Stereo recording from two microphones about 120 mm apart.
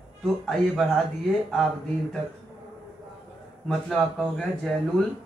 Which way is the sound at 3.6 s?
Centre (ahead or behind).